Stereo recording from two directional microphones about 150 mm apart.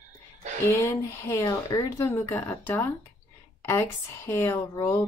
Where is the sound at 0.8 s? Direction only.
20° left (ahead or behind).